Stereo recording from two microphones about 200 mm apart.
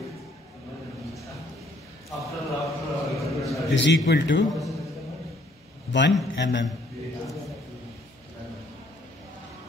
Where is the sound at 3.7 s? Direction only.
60° left (ahead or behind).